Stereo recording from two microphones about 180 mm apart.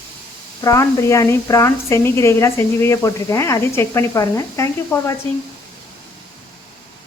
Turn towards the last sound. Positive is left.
turn(degrees=15)  # may be behind; listen again after turning